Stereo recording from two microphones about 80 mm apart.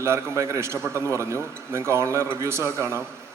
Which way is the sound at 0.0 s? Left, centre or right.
Right.